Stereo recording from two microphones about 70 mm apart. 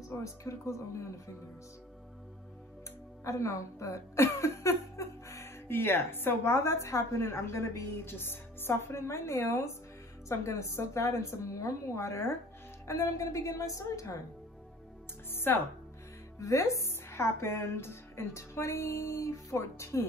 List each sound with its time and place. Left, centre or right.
0.1 s speech: left
3.3 s speech: left
15.3 s speech: left
16.3 s speech: left